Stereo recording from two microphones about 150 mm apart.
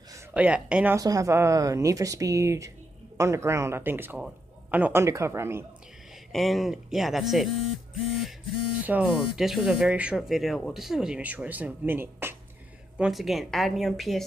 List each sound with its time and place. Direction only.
0.3 s speech: 10° right (ahead or behind)
0.9 s speech: 20° right (ahead or behind)
6.3 s a woman's voice: centre (ahead or behind); by 12.4 s 15° right (ahead or behind)
12.9 s a woman's voice: 5° right (ahead or behind)